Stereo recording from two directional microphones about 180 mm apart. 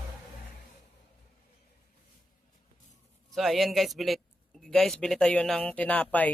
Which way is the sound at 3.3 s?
Centre (ahead or behind).